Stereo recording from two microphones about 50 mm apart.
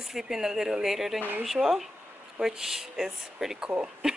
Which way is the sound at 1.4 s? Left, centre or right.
Centre.